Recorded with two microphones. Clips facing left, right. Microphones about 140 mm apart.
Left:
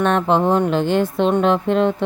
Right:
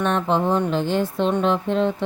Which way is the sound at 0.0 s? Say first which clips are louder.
Left 4 dB; 65° left (ahead or behind).